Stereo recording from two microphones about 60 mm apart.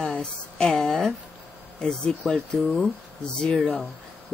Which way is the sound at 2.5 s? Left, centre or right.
Centre.